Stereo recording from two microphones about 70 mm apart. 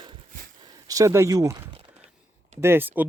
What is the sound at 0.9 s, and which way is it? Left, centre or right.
Speech, right.